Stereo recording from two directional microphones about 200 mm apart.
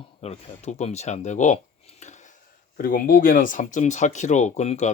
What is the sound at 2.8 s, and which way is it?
Speech, 45° left (ahead or behind).